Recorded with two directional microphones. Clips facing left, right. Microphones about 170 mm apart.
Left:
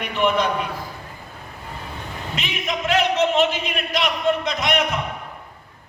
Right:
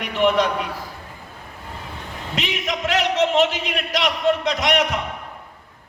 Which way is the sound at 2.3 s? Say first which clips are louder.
Right 2 dB; 90° right.